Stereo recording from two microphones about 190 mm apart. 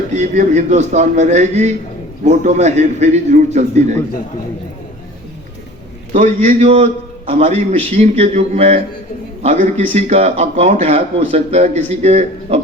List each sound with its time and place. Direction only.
0.1 s speech: 40° right (ahead or behind)
6.1 s a man's voice: 35° right (ahead or behind)